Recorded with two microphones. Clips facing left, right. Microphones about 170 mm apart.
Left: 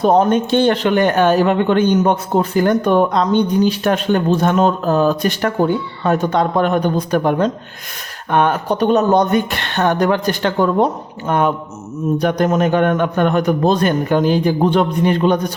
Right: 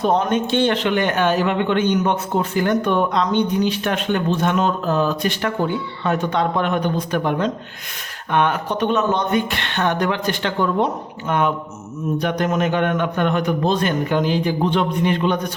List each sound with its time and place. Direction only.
0.0 s a man's voice: 35° left (ahead or behind)